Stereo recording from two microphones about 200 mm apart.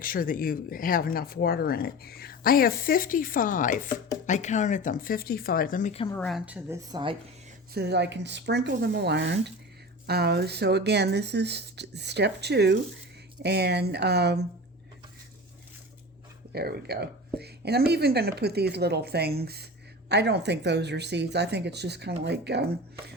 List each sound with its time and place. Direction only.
0.0 s speech: 45° left (ahead or behind)
6.2 s a woman's voice: 5° right (ahead or behind)
6.9 s speech: 25° right (ahead or behind)
7.7 s speech: 55° right (ahead or behind)
16.5 s speech: 50° right (ahead or behind)